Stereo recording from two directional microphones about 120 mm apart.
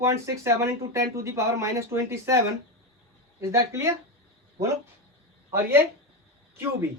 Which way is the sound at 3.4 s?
25° right (ahead or behind).